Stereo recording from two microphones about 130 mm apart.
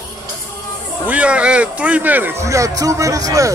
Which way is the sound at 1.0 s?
10° right (ahead or behind).